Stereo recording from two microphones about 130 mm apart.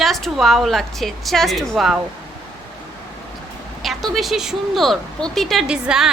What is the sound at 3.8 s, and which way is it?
A woman's voice, centre (ahead or behind).